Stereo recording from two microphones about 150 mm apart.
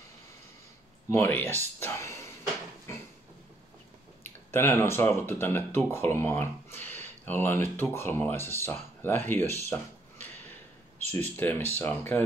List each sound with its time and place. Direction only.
1.1 s speech: 15° left (ahead or behind)
4.5 s speech: 15° left (ahead or behind)
11.1 s speech: 15° left (ahead or behind)